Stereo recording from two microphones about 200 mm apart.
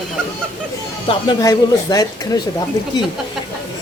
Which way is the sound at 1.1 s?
20° left (ahead or behind).